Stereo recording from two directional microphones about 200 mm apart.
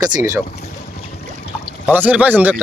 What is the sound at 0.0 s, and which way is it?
Speech, 15° right (ahead or behind).